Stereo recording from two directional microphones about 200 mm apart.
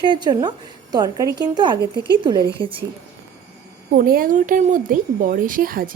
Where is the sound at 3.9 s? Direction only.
45° right (ahead or behind).